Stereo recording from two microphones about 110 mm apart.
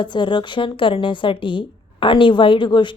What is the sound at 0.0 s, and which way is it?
Speech, 45° left (ahead or behind).